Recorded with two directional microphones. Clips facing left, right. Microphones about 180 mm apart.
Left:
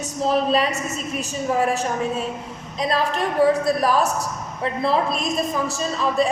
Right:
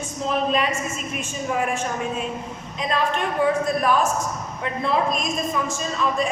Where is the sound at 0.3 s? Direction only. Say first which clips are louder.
Left 3 dB; 35° left (ahead or behind).